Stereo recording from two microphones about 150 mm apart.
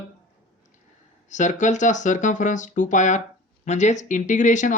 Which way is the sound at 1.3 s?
55° left (ahead or behind).